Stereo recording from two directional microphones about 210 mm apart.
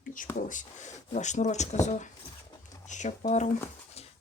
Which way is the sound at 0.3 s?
35° left (ahead or behind).